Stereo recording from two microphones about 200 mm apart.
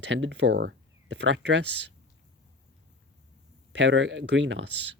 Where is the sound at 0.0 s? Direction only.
60° right (ahead or behind).